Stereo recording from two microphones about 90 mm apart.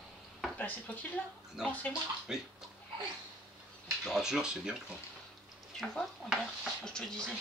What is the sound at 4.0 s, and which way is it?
Speech, 5° right (ahead or behind).